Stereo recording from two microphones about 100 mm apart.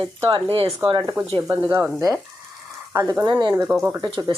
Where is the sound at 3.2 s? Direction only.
50° right (ahead or behind).